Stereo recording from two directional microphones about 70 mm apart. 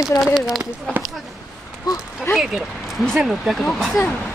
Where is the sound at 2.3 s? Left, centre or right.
Left.